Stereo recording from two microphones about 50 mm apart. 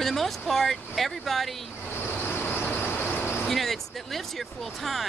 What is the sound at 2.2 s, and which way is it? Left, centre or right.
Vehicle, left.